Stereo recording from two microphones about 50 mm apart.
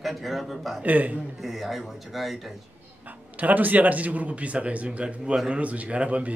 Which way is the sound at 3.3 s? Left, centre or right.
Right.